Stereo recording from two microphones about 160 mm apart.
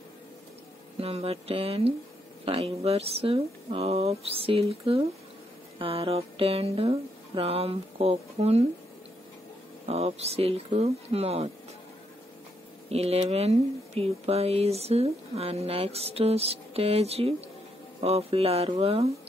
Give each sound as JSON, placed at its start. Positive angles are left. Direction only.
{"t": 0.9, "sound": "speech", "side_deg": -40}
{"t": 9.8, "sound": "speech", "side_deg": -40}
{"t": 12.9, "sound": "speech", "side_deg": -40}